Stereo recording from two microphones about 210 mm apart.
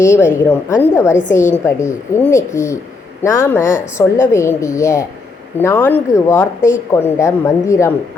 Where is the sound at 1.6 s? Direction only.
10° left (ahead or behind).